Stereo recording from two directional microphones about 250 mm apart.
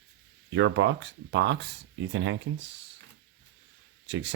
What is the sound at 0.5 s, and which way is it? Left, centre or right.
Speech, right.